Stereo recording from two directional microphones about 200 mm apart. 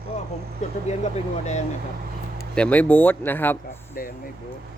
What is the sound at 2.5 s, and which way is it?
Speech, 5° left (ahead or behind).